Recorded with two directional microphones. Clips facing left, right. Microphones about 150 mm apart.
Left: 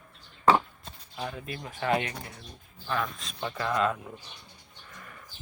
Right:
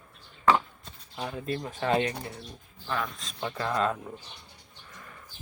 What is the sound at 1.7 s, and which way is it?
Speech, 25° right (ahead or behind).